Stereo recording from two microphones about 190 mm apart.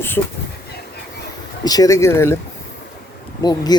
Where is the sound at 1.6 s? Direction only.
20° left (ahead or behind).